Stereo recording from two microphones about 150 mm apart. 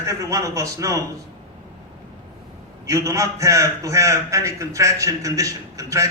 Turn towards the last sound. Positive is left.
turn(degrees=-20)  # may be behind; listen again after turning